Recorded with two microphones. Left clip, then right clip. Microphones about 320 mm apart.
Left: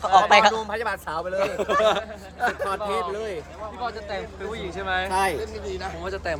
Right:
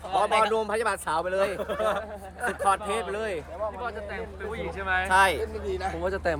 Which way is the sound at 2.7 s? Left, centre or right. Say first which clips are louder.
Even; right.